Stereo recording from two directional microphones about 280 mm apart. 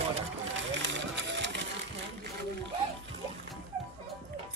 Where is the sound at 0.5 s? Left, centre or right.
Right.